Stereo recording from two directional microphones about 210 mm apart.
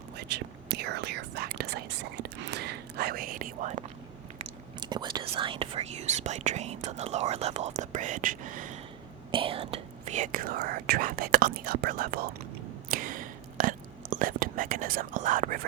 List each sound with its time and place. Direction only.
0.2 s whispering: 55° right (ahead or behind); by 3.8 s 35° right (ahead or behind)
4.4 s speech: 20° right (ahead or behind); by 8.8 s 35° right (ahead or behind)
9.3 s speech: 25° right (ahead or behind); by 12.3 s 45° right (ahead or behind)
12.9 s whispering: 40° right (ahead or behind)